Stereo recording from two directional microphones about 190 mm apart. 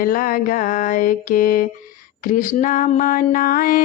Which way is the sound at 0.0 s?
50° left (ahead or behind).